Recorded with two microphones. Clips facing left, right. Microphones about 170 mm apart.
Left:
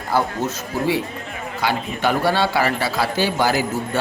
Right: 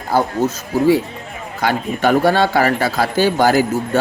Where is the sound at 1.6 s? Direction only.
50° right (ahead or behind).